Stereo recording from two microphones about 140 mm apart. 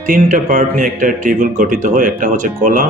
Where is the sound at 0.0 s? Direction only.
75° right (ahead or behind).